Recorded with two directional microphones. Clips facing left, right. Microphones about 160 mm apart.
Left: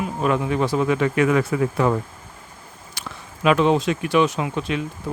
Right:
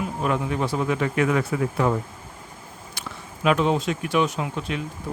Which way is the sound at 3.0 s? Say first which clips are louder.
Left 1 dB; 90° left.